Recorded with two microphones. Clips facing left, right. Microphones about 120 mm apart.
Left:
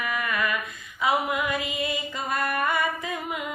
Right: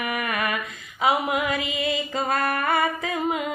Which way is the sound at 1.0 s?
90° right.